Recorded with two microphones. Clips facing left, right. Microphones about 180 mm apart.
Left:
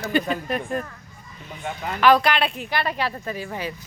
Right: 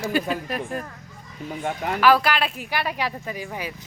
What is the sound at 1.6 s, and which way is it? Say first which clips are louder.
Speech: right 3 dB; 60° right (ahead or behind).